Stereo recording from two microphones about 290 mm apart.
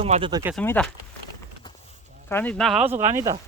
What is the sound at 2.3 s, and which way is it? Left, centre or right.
Speech, centre.